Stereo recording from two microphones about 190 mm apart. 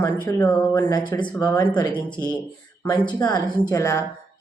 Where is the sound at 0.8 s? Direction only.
15° left (ahead or behind).